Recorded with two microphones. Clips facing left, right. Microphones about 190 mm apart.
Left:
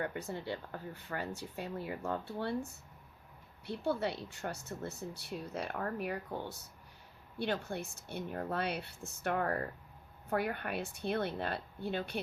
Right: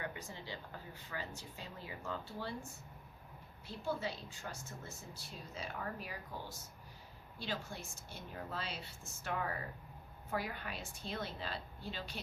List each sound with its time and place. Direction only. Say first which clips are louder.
0.0 s speech: left 7 dB; 55° left (ahead or behind)
3.7 s speech: left 6 dB; 65° left (ahead or behind)